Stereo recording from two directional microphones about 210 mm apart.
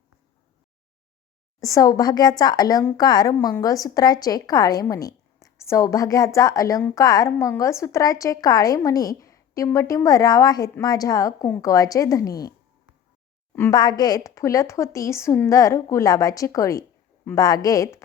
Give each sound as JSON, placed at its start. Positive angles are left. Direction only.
{"t": 1.6, "sound": "a woman's voice", "side_deg": 15}
{"t": 13.6, "sound": "a woman's voice", "side_deg": 20}